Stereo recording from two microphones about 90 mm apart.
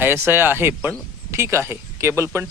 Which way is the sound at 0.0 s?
25° right (ahead or behind).